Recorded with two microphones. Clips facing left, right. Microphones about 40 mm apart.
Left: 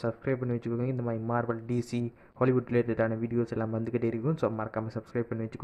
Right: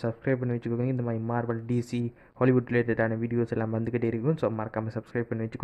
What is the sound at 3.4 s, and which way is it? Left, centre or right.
Speech, right.